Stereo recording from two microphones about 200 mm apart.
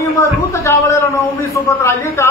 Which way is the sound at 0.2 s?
15° left (ahead or behind).